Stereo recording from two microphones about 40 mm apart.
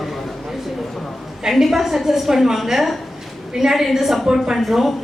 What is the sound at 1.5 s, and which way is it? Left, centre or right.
A woman's voice, centre.